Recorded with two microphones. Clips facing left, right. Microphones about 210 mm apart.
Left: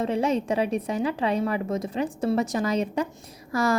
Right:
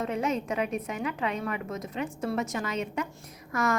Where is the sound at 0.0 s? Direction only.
30° left (ahead or behind).